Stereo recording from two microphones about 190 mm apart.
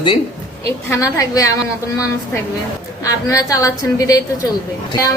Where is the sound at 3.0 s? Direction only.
15° left (ahead or behind).